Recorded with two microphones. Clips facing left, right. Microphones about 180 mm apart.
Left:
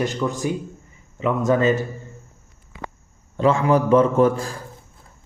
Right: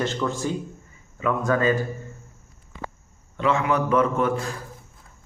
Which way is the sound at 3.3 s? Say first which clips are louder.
Left 5 dB; 35° left (ahead or behind).